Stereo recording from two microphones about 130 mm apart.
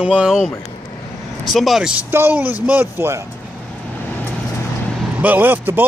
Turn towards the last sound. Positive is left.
turn(degrees=-15)  # may be behind; listen again after turning